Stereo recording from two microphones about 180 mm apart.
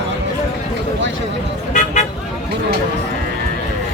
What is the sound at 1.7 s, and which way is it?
Vehicle, 40° left (ahead or behind).